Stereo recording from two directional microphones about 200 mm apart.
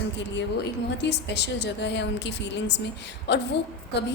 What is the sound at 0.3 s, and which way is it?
A woman's voice, 60° left (ahead or behind).